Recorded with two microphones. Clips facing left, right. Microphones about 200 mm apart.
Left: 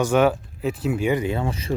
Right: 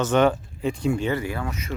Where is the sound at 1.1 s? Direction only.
20° left (ahead or behind).